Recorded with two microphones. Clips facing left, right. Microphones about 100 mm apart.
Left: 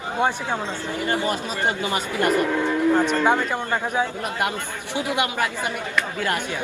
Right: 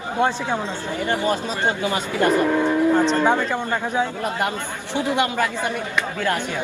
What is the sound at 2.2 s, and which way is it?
Speech, 20° right (ahead or behind).